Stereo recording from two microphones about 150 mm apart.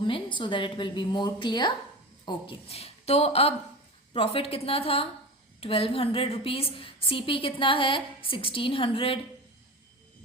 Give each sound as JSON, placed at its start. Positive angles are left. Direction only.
{"t": 0.0, "sound": "a woman's voice", "side_deg": 35}